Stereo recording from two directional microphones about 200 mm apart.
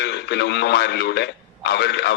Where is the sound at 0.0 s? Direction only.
55° left (ahead or behind).